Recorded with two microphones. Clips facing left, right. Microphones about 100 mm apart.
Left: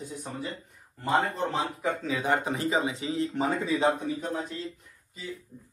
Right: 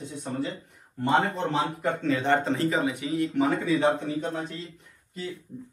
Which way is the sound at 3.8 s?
25° right (ahead or behind).